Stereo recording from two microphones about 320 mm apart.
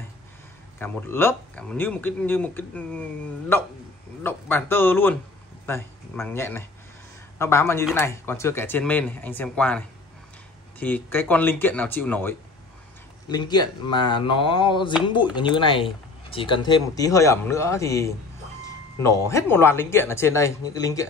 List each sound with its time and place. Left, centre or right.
0.7 s speech: centre